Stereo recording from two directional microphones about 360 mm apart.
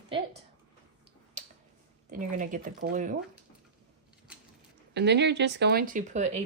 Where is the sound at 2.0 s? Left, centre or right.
Right.